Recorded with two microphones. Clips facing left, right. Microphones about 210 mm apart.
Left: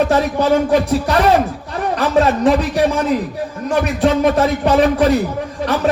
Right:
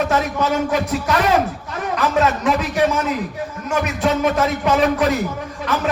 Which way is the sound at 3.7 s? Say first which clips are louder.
Left 4 dB; 35° left (ahead or behind).